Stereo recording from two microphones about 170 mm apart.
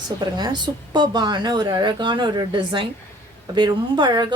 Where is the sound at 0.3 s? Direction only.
25° right (ahead or behind).